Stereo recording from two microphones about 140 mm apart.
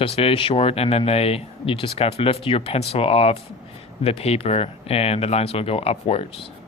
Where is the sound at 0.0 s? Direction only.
45° left (ahead or behind).